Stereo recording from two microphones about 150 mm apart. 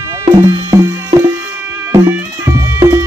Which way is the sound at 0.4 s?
20° right (ahead or behind).